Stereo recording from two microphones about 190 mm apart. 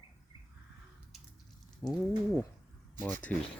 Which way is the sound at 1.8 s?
10° left (ahead or behind).